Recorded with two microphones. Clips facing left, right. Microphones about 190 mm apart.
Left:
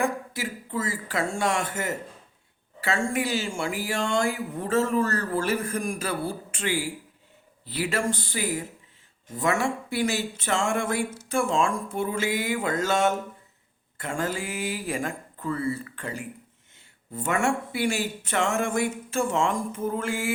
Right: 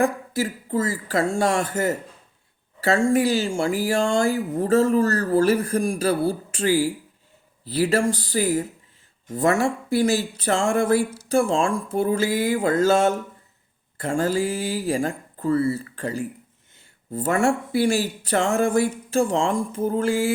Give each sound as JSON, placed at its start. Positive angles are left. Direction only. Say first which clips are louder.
{"t": 0.0, "sound": "speech", "louder": "right 6 dB", "side_deg": -35}